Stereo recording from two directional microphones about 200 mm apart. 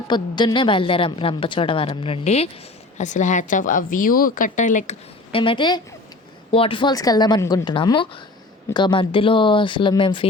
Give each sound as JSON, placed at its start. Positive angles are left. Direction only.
{"t": 0.1, "sound": "a woman's voice", "side_deg": 20}
{"t": 5.3, "sound": "a woman's voice", "side_deg": 25}